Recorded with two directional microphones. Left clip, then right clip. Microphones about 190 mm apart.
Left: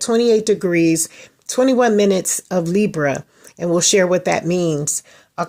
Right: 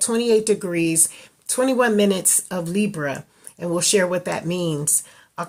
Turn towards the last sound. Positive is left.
turn(degrees=25)  # may be behind; listen again after turning